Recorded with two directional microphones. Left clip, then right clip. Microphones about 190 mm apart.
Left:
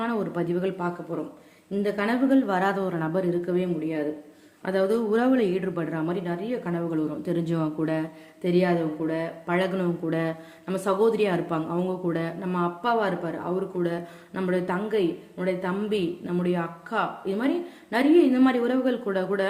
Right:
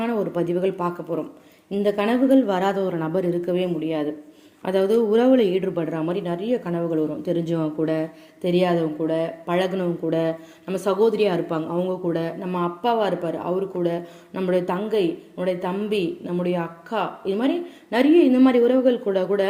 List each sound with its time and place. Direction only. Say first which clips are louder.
0.0 s a woman's voice: right 4 dB; 10° right (ahead or behind)
7.3 s speech: right 4 dB; centre (ahead or behind)
8.4 s a woman's voice: right 3 dB; 20° right (ahead or behind)
9.7 s speech: right 4 dB; centre (ahead or behind)
16.0 s speech: right 3 dB; centre (ahead or behind)